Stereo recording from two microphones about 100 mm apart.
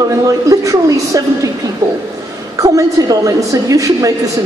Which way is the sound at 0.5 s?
35° right (ahead or behind).